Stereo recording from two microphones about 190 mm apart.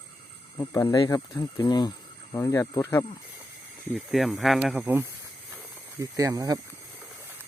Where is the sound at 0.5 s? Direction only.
15° left (ahead or behind).